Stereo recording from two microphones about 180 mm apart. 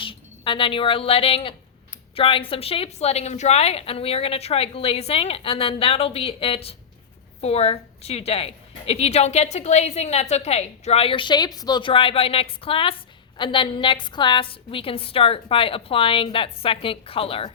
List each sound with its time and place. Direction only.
0.0 s a woman's voice: 30° left (ahead or behind)